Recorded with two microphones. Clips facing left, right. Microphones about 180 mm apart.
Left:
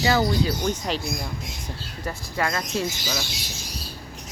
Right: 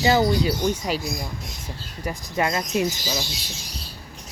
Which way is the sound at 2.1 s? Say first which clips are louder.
Right 3 dB; 20° right (ahead or behind).